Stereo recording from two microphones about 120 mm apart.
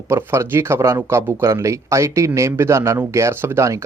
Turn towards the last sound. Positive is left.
turn(degrees=-25)  # may be behind; listen again after turning